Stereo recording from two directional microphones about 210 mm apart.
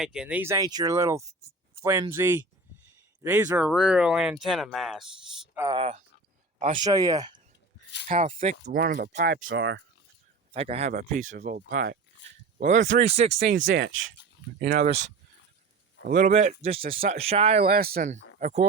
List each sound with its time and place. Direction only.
0.0 s speech: 5° right (ahead or behind)
5.5 s speech: 15° right (ahead or behind)
6.6 s speech: 35° right (ahead or behind)
6.8 s speech: 15° right (ahead or behind)
8.0 s speech: 40° right (ahead or behind)
9.4 s speech: 60° right (ahead or behind)
10.5 s speech: 30° right (ahead or behind)
10.9 s speech: 40° right (ahead or behind)
13.6 s speech: 65° right (ahead or behind)
16.0 s speech: 45° right (ahead or behind)
16.3 s speech: 30° right (ahead or behind)
17.6 s speech: 45° right (ahead or behind)